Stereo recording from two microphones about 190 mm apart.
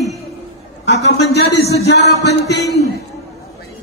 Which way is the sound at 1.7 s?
60° left (ahead or behind).